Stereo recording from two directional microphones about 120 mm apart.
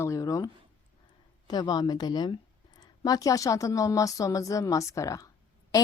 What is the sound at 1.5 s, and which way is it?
A woman's voice, 35° left (ahead or behind).